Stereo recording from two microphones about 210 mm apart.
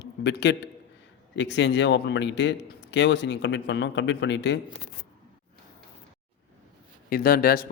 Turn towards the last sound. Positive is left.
turn(degrees=45)  # may be behind; listen again after turning